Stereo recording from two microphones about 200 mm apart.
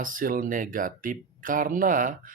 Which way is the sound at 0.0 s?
45° right (ahead or behind).